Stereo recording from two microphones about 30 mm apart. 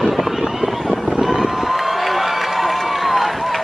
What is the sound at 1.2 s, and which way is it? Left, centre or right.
Run, centre.